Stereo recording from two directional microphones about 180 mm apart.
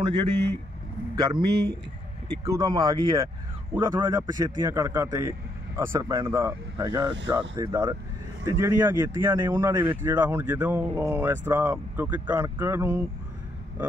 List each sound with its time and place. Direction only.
0.0 s speech: 25° right (ahead or behind)